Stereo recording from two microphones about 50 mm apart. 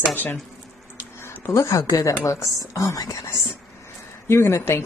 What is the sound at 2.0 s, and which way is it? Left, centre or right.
A woman's voice, left.